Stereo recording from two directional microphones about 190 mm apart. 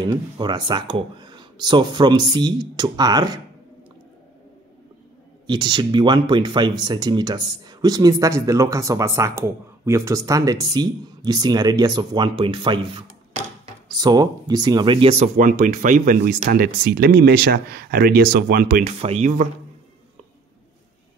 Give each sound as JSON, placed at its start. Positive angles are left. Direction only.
{"t": 0.0, "sound": "speech", "side_deg": -20}
{"t": 5.5, "sound": "speech", "side_deg": -25}
{"t": 18.9, "sound": "speech", "side_deg": -35}